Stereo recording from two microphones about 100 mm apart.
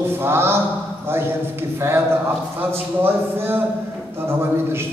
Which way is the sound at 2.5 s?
20° right (ahead or behind).